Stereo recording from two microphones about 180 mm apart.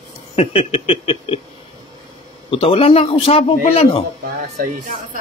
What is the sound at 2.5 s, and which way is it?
A man's voice, 30° left (ahead or behind).